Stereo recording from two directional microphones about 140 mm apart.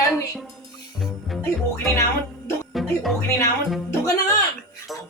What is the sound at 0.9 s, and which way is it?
Music, centre (ahead or behind).